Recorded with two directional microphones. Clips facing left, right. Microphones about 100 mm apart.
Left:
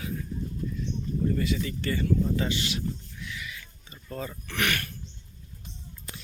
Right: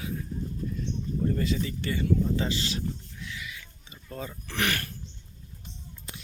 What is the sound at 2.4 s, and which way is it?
Speech, 30° right (ahead or behind).